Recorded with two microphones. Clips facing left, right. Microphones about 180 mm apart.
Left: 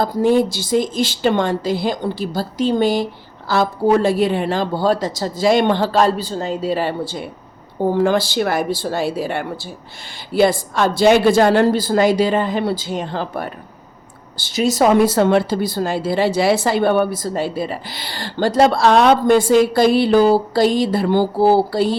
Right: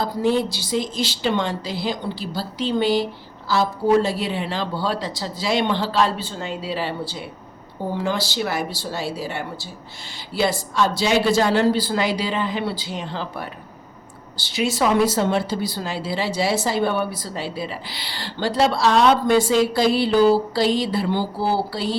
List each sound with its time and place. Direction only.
0.0 s a woman's voice: 50° left (ahead or behind)